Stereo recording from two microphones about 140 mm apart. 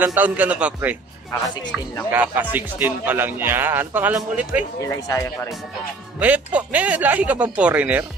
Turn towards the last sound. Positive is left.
turn(degrees=-10)  # may be behind; listen again after turning